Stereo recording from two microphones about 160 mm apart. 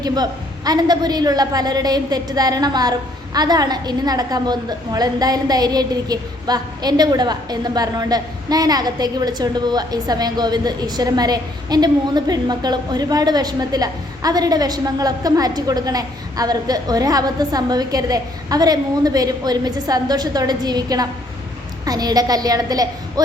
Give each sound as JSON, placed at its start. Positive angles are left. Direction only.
{"t": 0.0, "sound": "a woman's voice", "side_deg": -25}